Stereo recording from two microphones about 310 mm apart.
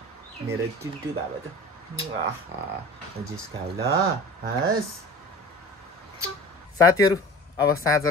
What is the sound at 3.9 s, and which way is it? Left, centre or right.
Speech, right.